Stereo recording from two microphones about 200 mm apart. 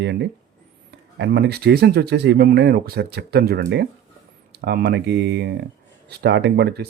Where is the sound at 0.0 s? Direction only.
60° right (ahead or behind).